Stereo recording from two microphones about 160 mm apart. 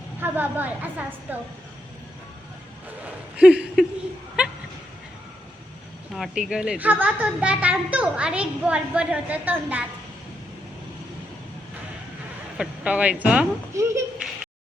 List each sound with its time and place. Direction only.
0.2 s a woman's voice: 10° right (ahead or behind)
3.0 s a sound: 5° right (ahead or behind)
6.1 s a woman's voice: centre (ahead or behind)
12.5 s speech: 10° right (ahead or behind)
13.7 s speech: 20° right (ahead or behind)